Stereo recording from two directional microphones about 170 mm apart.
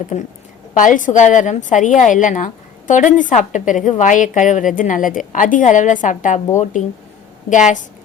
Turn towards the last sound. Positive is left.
turn(degrees=45)  # may be behind; listen again after turning